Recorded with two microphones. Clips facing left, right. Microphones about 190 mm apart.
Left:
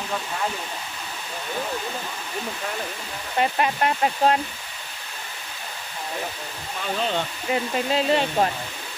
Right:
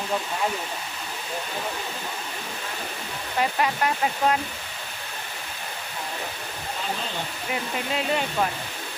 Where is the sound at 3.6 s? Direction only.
25° left (ahead or behind).